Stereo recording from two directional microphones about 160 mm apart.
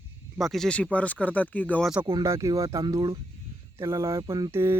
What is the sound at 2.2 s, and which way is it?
Speech, 20° right (ahead or behind).